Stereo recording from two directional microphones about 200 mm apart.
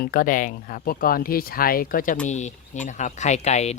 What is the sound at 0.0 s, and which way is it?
Speech, 45° left (ahead or behind).